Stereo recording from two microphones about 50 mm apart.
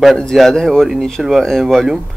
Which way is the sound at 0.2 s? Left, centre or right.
Centre.